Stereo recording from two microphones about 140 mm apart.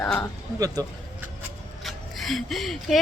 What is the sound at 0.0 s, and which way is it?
Speech, 5° left (ahead or behind).